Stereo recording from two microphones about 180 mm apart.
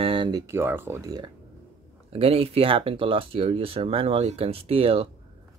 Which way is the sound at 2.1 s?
30° right (ahead or behind).